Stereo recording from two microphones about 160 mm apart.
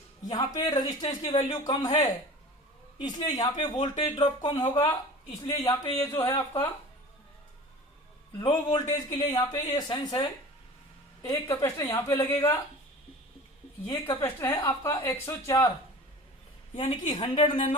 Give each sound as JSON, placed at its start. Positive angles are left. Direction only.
{"t": 0.3, "sound": "a woman's voice", "side_deg": 25}
{"t": 8.4, "sound": "a woman's voice", "side_deg": 25}
{"t": 11.3, "sound": "a woman's voice", "side_deg": 20}
{"t": 13.8, "sound": "a woman's voice", "side_deg": 15}
{"t": 16.7, "sound": "a woman's voice", "side_deg": 30}